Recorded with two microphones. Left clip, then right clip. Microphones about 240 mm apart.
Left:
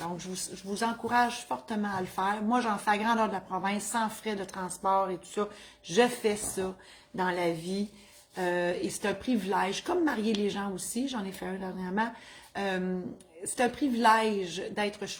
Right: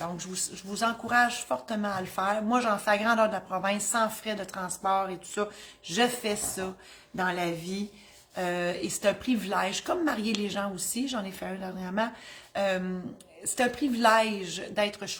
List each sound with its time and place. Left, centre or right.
0.2 s a woman's voice: centre